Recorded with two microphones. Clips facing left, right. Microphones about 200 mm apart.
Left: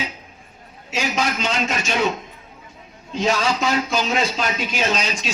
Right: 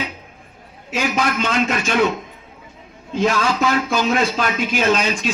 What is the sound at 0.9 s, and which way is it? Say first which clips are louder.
A man's voice: right 3 dB; 55° right (ahead or behind).